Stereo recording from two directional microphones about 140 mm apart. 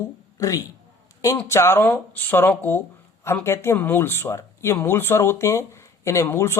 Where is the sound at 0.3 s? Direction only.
20° left (ahead or behind).